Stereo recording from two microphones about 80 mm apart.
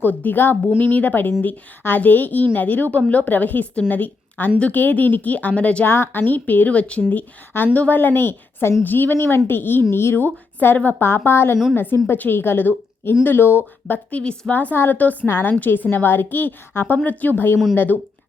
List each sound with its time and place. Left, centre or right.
0.0 s a woman's voice: left
5.9 s a woman's voice: left